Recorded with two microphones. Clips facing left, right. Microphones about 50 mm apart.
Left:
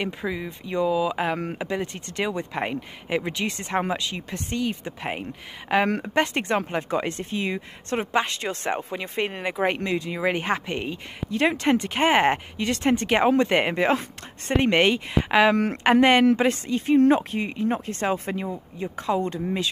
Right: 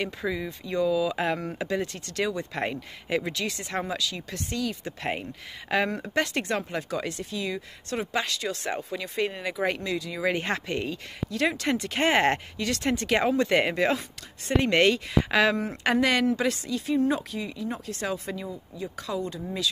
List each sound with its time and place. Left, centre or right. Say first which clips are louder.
0.0 s speech: left 1 dB; centre
15.5 s speech: left 7 dB; left
15.8 s speech: left 6 dB; left